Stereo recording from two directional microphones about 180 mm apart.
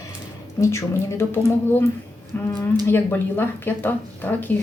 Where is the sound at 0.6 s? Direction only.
15° left (ahead or behind).